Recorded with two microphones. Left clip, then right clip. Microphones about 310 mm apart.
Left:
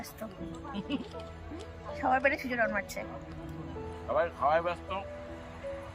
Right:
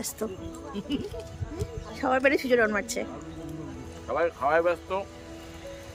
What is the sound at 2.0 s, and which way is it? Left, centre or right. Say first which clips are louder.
A woman's voice: right 4 dB; centre.